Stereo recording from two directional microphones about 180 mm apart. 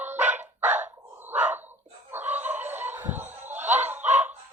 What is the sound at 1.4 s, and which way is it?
Chicken, 10° right (ahead or behind).